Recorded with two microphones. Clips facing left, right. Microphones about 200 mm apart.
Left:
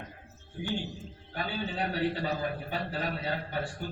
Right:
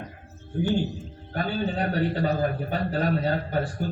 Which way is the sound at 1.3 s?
45° right (ahead or behind).